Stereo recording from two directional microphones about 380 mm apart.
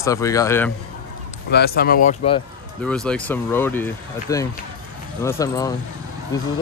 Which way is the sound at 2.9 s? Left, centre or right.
Centre.